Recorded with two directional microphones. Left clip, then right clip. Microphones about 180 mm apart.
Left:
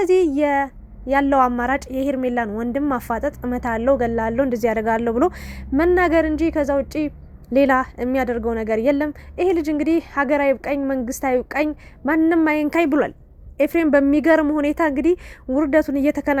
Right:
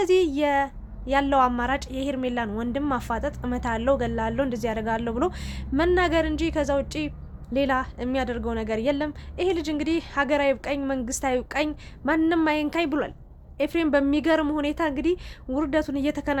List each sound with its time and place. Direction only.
0.0 s a woman's voice: 25° left (ahead or behind)
7.5 s a woman's voice: 40° left (ahead or behind)